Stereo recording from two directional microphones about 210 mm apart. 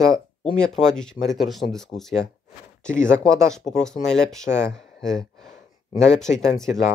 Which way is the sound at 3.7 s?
5° left (ahead or behind).